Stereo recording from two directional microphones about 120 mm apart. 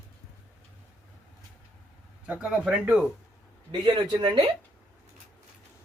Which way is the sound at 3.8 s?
40° right (ahead or behind).